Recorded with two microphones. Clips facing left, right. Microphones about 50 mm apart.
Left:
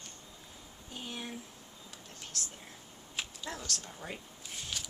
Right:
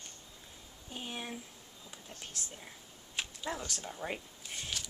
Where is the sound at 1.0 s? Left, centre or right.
Centre.